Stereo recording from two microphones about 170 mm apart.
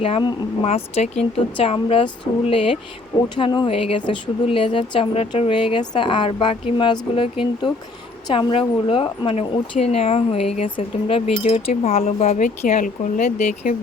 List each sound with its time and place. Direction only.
0.0 s a woman's voice: 30° left (ahead or behind); by 13.7 s 50° left (ahead or behind)